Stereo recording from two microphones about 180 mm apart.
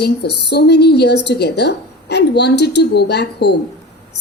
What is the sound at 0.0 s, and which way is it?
A woman's voice, 65° left (ahead or behind).